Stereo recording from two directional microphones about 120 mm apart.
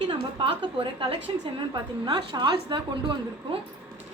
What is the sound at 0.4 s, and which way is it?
Speech, 45° right (ahead or behind).